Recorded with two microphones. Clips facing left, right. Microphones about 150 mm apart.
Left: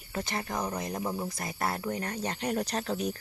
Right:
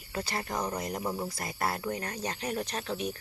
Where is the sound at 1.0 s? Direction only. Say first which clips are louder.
Left 1 dB; centre (ahead or behind).